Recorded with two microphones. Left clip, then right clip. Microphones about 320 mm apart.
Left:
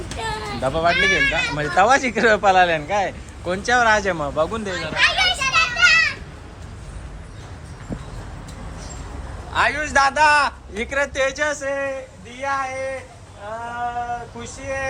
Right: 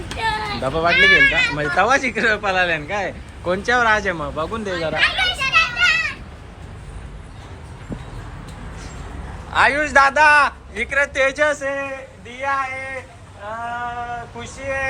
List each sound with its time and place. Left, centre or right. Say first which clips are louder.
0.1 s speech: right 6 dB; centre
4.9 s children playing: left 2 dB; centre
9.5 s a man's voice: right 4 dB; centre
14.1 s a man's voice: left 1 dB; centre